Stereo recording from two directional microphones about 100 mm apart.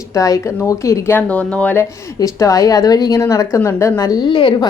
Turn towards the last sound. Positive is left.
turn(degrees=55)  # may be behind; listen again after turning